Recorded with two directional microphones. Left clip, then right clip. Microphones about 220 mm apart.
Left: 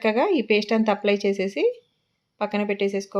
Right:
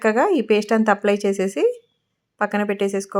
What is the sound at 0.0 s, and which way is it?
Speech, 15° right (ahead or behind).